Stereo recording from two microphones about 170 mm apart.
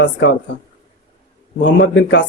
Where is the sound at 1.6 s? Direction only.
90° left.